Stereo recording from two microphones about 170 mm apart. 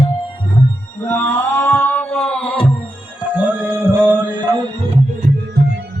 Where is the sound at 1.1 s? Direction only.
15° left (ahead or behind).